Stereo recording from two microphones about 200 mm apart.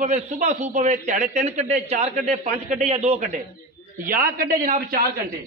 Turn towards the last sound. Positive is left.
turn(degrees=-50)  # may be behind; listen again after turning